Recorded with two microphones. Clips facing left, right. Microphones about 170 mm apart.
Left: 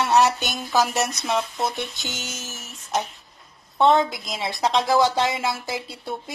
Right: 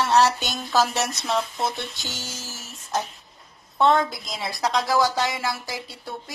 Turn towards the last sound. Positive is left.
turn(degrees=25)  # may be behind; listen again after turning